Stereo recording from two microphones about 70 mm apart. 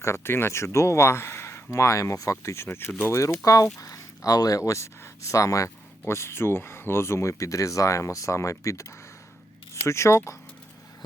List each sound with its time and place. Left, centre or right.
0.0 s speech: left